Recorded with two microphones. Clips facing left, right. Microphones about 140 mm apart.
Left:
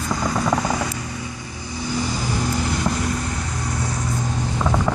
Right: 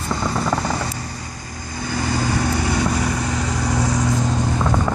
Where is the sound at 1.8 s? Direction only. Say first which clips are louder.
Right 2 dB; 60° right (ahead or behind); by 4.2 s 90° right.